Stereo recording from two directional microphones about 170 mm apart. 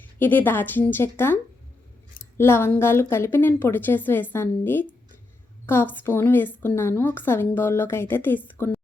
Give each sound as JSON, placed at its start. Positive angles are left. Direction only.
{"t": 0.0, "sound": "a woman's voice", "side_deg": 10}
{"t": 2.4, "sound": "a woman's voice", "side_deg": 15}